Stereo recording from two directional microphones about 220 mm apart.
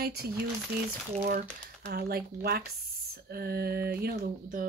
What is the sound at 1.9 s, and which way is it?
Speech, 45° right (ahead or behind).